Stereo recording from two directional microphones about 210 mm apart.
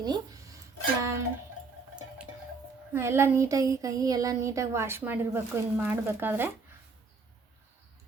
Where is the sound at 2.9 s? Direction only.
10° right (ahead or behind).